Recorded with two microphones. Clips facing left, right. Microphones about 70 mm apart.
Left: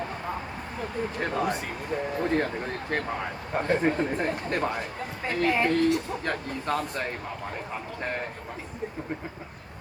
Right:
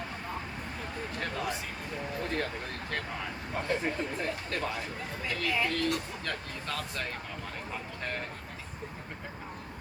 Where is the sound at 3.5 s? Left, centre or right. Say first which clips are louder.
Left 7 dB; left.